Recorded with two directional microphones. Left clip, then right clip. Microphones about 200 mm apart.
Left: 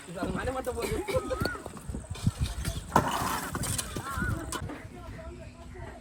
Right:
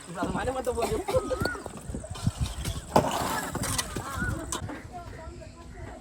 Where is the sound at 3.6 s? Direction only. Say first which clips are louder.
Right 4 dB; 15° right (ahead or behind).